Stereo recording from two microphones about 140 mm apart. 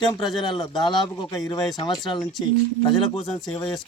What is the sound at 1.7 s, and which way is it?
Speech, 30° left (ahead or behind).